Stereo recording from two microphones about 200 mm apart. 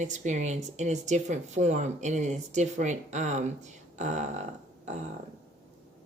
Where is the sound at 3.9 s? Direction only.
35° right (ahead or behind).